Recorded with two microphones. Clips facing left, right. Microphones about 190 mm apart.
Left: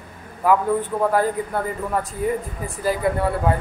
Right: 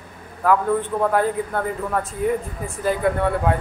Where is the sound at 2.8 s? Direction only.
5° left (ahead or behind).